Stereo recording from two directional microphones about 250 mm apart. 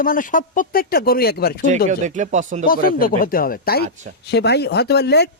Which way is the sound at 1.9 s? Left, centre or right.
Right.